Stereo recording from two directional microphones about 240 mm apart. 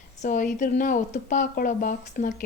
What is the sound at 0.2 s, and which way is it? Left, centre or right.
Speech, left.